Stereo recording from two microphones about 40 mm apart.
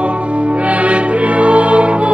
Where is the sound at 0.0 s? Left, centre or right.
Right.